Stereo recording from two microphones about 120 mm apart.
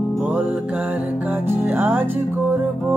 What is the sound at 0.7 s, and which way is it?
Music, 10° right (ahead or behind).